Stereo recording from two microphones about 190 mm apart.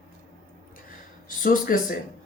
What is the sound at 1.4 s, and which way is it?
Speech, 45° left (ahead or behind).